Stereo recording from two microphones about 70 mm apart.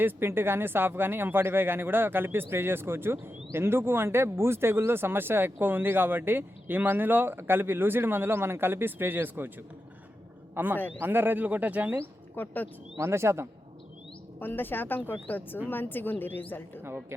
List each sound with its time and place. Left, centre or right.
0.0 s a man's voice: right
10.5 s a man's voice: right
12.4 s speech: left
13.0 s a man's voice: right
14.3 s speech: left
16.8 s a man's voice: right